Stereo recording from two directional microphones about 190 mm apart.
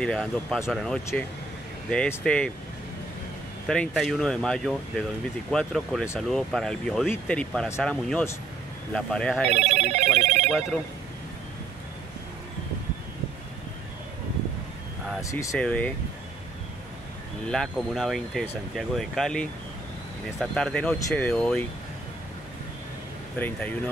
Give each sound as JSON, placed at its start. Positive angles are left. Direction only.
{"t": 0.0, "sound": "speech", "side_deg": 0}
{"t": 3.6, "sound": "speech", "side_deg": 5}
{"t": 9.5, "sound": "telephone bell ringing", "side_deg": -35}
{"t": 15.2, "sound": "speech", "side_deg": 15}
{"t": 15.6, "sound": "speech", "side_deg": 5}
{"t": 17.5, "sound": "speech", "side_deg": 0}
{"t": 23.3, "sound": "speech", "side_deg": 10}